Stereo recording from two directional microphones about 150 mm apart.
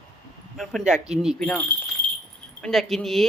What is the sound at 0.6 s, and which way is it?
Speech, centre (ahead or behind).